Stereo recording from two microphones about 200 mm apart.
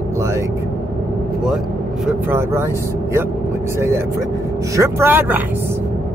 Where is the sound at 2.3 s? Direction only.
15° right (ahead or behind).